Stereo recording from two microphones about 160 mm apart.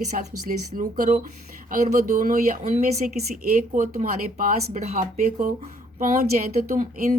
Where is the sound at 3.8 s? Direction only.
60° right (ahead or behind).